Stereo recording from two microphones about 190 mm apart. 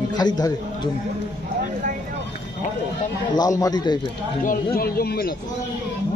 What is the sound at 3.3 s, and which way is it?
Speech, 20° left (ahead or behind).